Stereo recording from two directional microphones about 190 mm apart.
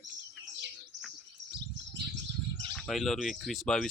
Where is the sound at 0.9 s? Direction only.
70° right (ahead or behind).